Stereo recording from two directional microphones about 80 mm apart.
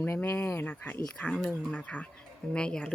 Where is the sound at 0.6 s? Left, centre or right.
Centre.